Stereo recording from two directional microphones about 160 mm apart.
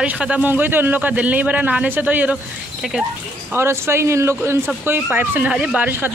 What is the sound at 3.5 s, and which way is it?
Speech, 15° right (ahead or behind).